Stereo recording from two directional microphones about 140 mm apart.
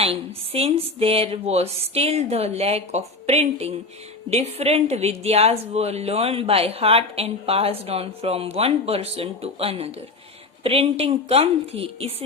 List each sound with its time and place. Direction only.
0.0 s a woman's voice: 45° right (ahead or behind)